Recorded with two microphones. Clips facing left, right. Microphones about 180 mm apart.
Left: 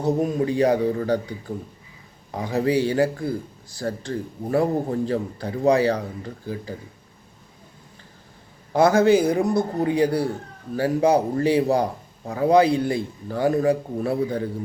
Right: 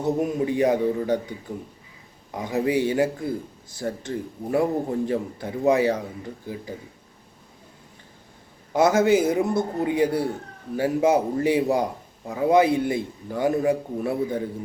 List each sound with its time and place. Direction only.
0.4 s speech: 20° right (ahead or behind)
8.7 s speech: 20° right (ahead or behind)